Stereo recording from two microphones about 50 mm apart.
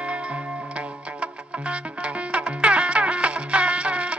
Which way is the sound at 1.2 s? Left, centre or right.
Right.